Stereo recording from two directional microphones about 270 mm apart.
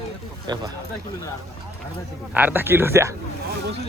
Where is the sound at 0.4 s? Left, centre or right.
Centre.